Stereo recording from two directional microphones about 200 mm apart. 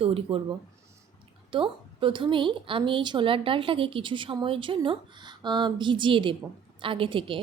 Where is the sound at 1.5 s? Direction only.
25° right (ahead or behind).